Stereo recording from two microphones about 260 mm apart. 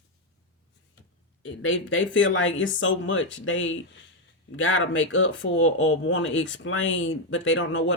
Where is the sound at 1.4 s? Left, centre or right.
Left.